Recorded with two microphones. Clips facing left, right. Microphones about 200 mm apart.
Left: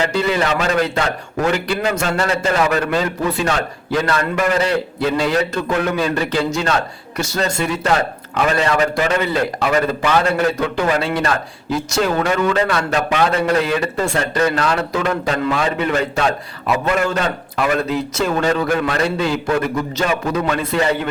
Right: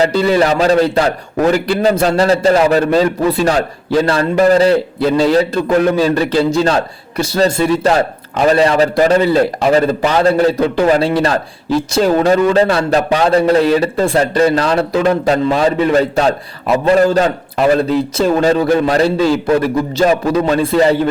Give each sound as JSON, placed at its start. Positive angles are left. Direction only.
{"t": 0.0, "sound": "a man's voice", "side_deg": -35}